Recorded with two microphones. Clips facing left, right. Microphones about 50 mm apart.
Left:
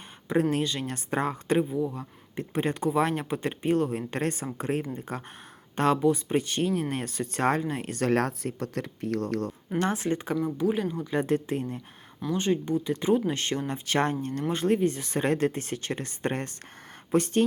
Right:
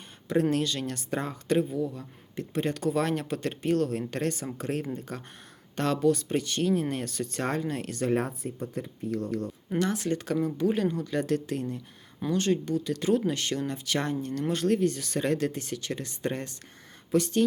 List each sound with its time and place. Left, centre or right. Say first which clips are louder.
0.5 s speech: even; left
1.5 s speech: even; centre
2.3 s speech: left 1 dB; left
6.4 s speech: right 1 dB; left
8.0 s speech: left 3 dB; left
9.7 s speech: left 1 dB; left
10.6 s speech: right 1 dB; centre
11.1 s speech: left 2 dB; left
13.3 s speech: left 1 dB; left